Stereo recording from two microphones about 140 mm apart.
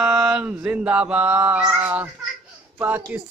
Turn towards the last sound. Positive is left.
turn(degrees=-10)  # may be behind; listen again after turning